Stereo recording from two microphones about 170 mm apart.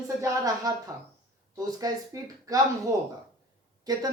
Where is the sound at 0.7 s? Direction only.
20° right (ahead or behind).